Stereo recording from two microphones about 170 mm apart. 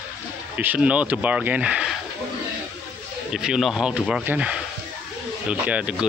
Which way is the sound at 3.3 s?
5° right (ahead or behind).